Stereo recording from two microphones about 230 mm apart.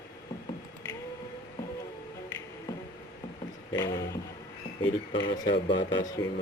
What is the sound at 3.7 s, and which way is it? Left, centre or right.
A man's voice, centre.